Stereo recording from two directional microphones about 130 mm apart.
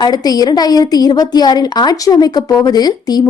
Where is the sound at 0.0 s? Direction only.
30° left (ahead or behind).